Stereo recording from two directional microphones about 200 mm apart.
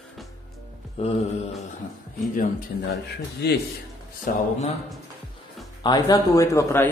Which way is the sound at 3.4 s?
55° left (ahead or behind).